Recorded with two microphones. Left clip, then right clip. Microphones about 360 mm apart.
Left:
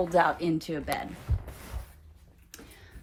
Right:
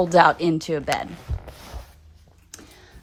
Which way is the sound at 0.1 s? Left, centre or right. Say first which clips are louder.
Right 10 dB; right.